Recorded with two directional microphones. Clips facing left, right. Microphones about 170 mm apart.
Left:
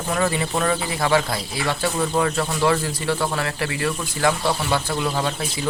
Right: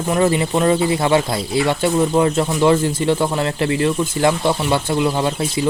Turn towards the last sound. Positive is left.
turn(degrees=-20)  # may be behind; listen again after turning